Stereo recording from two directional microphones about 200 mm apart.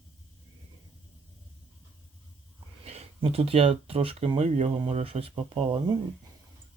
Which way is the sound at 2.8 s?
30° right (ahead or behind).